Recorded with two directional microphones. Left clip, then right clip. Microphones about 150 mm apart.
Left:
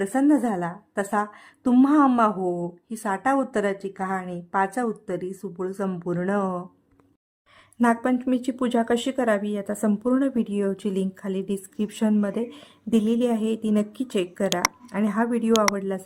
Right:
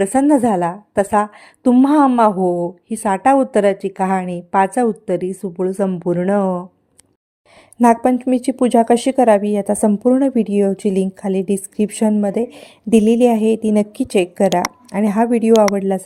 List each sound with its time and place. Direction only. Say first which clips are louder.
0.0 s speech: right 8 dB; 40° right (ahead or behind)
7.8 s a woman's voice: right 9 dB; 30° right (ahead or behind)